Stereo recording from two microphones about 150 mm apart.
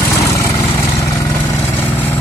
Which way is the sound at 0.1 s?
20° left (ahead or behind).